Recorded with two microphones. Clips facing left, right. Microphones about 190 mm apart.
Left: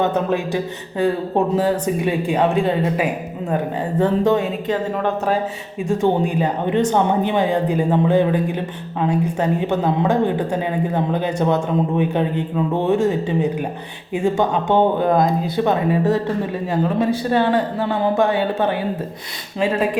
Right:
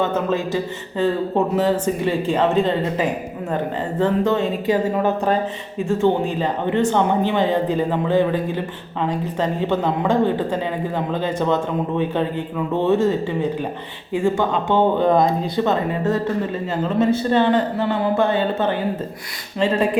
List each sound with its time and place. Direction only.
0.0 s speech: 15° left (ahead or behind)
4.6 s a woman's voice: 10° right (ahead or behind)
5.9 s speech: 15° left (ahead or behind)
15.6 s speech: 10° left (ahead or behind)